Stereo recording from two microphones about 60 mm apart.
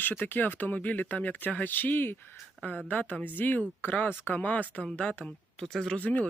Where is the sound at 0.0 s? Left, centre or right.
Left.